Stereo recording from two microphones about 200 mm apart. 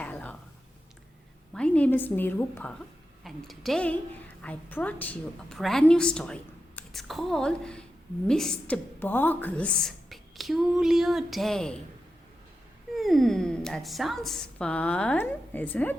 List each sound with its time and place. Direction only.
0.0 s a sound: 5° left (ahead or behind)
1.5 s a woman's voice: 5° left (ahead or behind)
13.0 s a woman's voice: centre (ahead or behind)